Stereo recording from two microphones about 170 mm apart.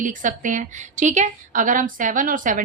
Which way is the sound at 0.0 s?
50° right (ahead or behind).